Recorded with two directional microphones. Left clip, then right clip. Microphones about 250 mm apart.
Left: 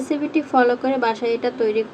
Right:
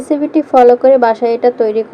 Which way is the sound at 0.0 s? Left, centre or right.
Centre.